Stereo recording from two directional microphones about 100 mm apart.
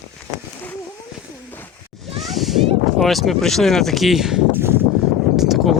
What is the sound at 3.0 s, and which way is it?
Speech, centre (ahead or behind).